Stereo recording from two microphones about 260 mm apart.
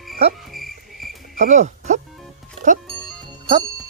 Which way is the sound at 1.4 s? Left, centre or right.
Right.